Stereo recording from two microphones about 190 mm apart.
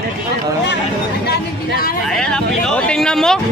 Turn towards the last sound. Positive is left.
turn(degrees=5)  # may be behind; listen again after turning